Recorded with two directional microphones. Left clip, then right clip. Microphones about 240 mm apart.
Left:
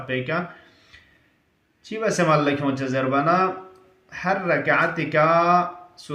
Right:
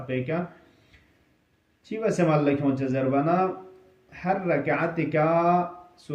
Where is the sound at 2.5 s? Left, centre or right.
Left.